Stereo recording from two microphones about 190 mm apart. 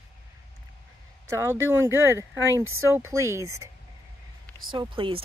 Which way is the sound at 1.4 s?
15° right (ahead or behind).